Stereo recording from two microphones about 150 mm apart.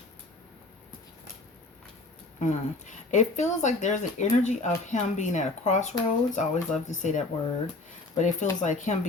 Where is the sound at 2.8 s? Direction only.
50° left (ahead or behind).